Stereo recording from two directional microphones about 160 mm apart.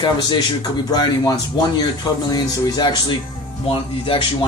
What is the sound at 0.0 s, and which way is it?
Speech, 25° left (ahead or behind).